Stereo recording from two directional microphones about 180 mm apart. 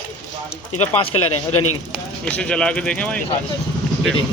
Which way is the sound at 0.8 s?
35° left (ahead or behind).